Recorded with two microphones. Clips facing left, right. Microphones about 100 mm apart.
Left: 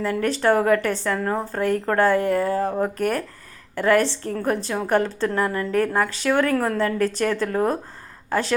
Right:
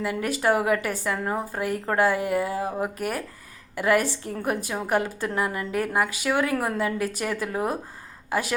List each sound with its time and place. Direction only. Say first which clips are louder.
0.0 s speech: left 4 dB; 10° right (ahead or behind)
4.2 s a woman's voice: left 5 dB; 45° left (ahead or behind)
4.4 s speech: left 3 dB; 15° right (ahead or behind)